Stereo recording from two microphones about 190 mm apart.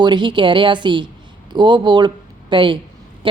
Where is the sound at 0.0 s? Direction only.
25° right (ahead or behind).